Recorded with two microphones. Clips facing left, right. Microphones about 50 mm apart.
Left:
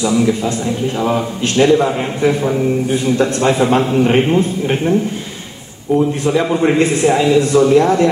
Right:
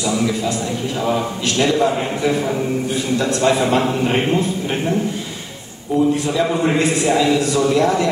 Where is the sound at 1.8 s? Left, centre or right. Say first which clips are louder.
Left 2 dB; centre.